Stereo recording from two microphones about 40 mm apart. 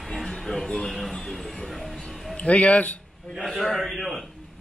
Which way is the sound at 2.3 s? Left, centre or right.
Left.